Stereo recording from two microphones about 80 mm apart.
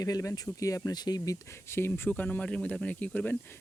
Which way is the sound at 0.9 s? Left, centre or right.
Left.